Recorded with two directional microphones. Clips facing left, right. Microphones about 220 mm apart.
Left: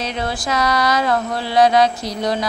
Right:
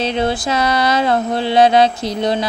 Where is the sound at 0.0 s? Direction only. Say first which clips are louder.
Right 6 dB; 25° right (ahead or behind).